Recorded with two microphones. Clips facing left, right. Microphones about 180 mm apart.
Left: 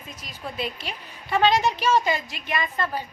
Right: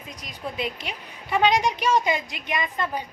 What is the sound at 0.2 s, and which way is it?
A woman's voice, 20° right (ahead or behind).